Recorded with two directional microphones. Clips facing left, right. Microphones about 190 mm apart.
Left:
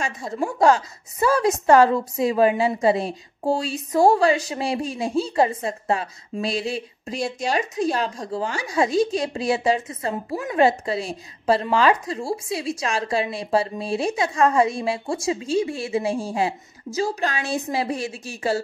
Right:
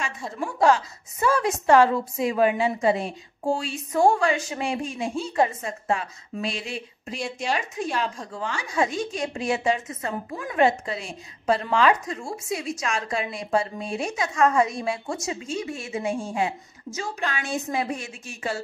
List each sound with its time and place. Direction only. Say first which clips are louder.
0.0 s a woman's voice: left 4 dB; 40° left (ahead or behind)